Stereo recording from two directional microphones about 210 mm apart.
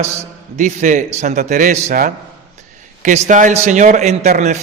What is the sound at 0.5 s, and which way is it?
A man's voice, 35° right (ahead or behind).